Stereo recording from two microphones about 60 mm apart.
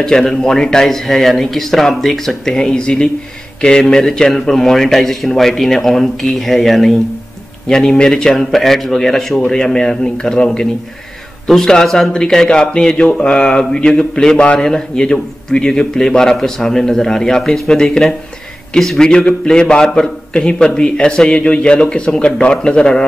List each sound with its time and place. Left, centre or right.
0.0 s a man's voice: centre